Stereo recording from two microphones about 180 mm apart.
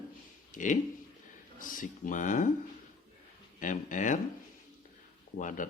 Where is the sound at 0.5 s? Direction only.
45° left (ahead or behind).